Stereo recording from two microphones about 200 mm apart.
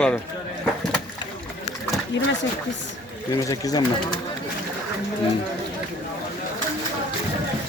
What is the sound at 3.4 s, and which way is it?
Speech, 15° left (ahead or behind).